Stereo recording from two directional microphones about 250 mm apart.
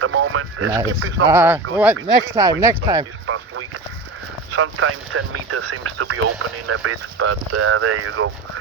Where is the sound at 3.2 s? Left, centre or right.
Right.